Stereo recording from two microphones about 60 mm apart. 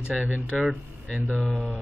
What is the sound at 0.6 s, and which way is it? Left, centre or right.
Speech, centre.